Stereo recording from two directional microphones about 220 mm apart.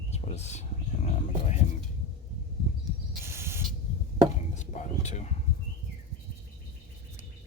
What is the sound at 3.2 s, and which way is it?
Owl, 10° right (ahead or behind).